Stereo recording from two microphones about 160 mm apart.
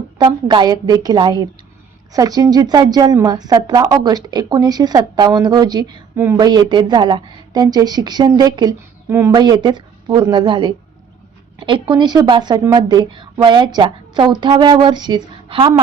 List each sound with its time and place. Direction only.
0.2 s a woman's voice: 25° right (ahead or behind)
9.0 s speech: 15° right (ahead or behind)
9.3 s a woman's voice: 25° right (ahead or behind)